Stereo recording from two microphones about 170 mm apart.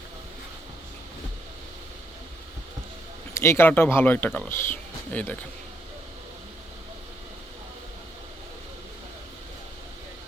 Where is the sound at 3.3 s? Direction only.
15° left (ahead or behind).